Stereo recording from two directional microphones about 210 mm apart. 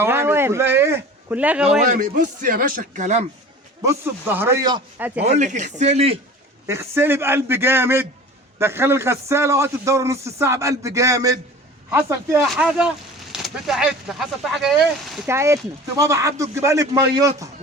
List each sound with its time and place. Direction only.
0.0 s a sound: 10° right (ahead or behind)
1.8 s speech: 40° right (ahead or behind)
3.8 s a man's voice: 15° right (ahead or behind)
5.2 s speech: 35° right (ahead or behind)
6.7 s a man's voice: 10° right (ahead or behind)
15.3 s a man's voice: 15° right (ahead or behind)